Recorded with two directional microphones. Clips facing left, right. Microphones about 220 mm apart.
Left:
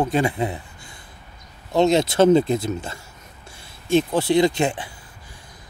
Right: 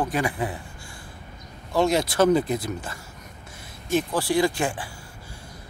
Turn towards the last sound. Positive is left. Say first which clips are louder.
# left 4 dB
turn(degrees=20)  # may be behind; listen again after turning